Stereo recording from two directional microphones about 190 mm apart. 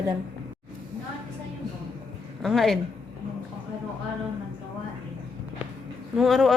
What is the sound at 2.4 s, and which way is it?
Speech, centre (ahead or behind).